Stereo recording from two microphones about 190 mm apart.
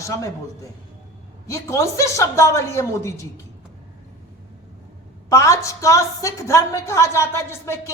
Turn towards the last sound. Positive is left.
turn(degrees=15)  # may be behind; listen again after turning